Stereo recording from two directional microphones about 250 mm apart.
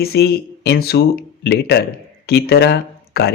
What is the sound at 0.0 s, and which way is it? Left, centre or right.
Speech, left.